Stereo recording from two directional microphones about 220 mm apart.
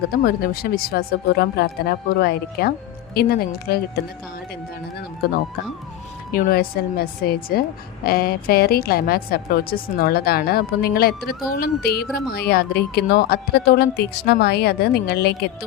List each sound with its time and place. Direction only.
0.1 s a woman's voice: 40° left (ahead or behind)
6.3 s a woman's voice: 40° left (ahead or behind)